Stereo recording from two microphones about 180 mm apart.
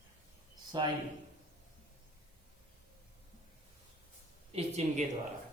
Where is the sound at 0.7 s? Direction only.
25° right (ahead or behind).